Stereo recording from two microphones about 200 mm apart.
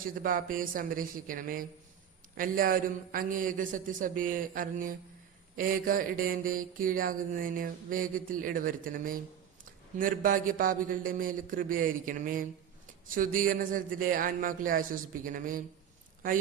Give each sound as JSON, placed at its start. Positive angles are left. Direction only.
{"t": 0.1, "sound": "mantra", "side_deg": -45}